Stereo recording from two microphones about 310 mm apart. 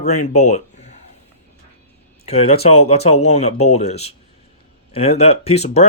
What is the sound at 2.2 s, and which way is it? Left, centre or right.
Speech, centre.